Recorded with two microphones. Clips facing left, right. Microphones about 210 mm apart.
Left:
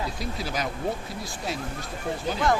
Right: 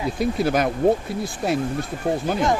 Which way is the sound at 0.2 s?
55° right (ahead or behind).